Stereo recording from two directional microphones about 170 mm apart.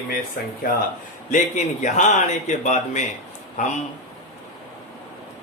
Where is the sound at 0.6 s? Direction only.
55° left (ahead or behind).